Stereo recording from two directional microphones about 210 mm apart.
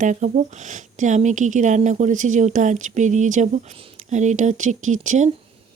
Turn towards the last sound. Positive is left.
turn(degrees=-35)  # may be behind; listen again after turning